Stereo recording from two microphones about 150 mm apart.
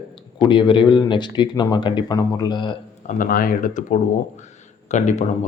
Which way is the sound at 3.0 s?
70° left (ahead or behind).